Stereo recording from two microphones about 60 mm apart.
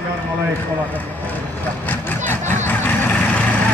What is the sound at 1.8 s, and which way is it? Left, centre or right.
Vehicle, left.